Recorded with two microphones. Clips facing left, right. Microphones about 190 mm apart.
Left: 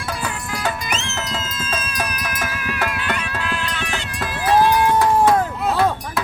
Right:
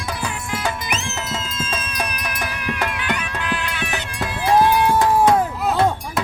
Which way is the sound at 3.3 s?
10° right (ahead or behind).